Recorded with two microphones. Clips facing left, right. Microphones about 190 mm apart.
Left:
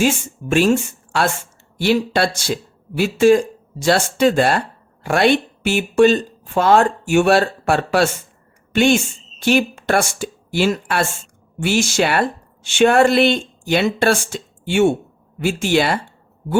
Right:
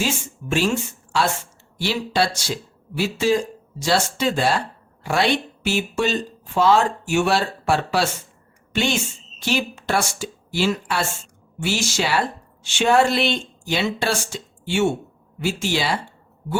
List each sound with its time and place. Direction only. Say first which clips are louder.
0.5 s a woman's voice: left 6 dB; 55° left (ahead or behind)